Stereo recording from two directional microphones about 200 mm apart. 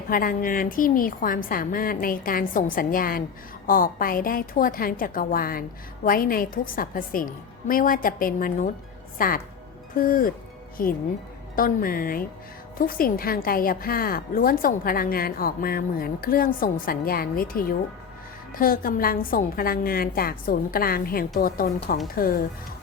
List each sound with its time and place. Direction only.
0.1 s a woman's voice: 45° left (ahead or behind)